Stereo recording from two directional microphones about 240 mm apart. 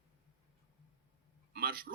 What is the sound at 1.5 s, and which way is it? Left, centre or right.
Speech, right.